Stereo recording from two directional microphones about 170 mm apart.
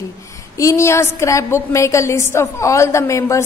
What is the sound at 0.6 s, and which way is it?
A woman's voice, 15° left (ahead or behind).